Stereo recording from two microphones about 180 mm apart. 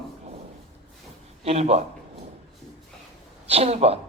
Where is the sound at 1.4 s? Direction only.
35° right (ahead or behind).